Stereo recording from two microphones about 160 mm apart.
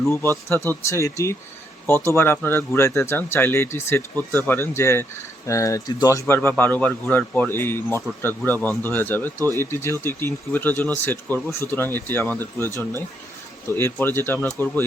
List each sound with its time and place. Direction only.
0.4 s speech: 15° left (ahead or behind)
13.7 s speech: 15° left (ahead or behind)